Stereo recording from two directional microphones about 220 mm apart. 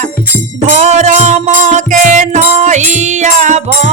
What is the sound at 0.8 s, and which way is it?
Music, 30° right (ahead or behind).